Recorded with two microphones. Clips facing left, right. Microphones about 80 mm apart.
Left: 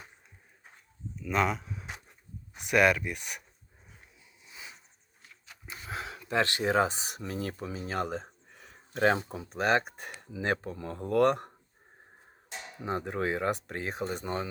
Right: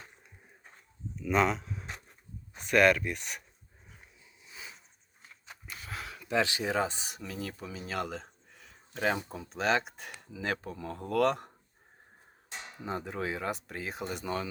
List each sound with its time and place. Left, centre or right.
1.1 s a sound: centre
2.6 s speech: centre
5.6 s a sound: centre
6.5 s speech: left
7.2 s speech: left
11.2 s speech: left
12.8 s speech: left